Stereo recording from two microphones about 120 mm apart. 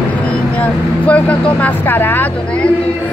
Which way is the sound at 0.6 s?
10° left (ahead or behind).